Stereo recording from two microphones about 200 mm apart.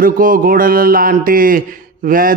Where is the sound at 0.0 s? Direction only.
45° right (ahead or behind).